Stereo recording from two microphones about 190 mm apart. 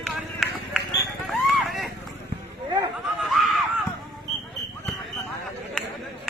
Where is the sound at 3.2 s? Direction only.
Centre (ahead or behind).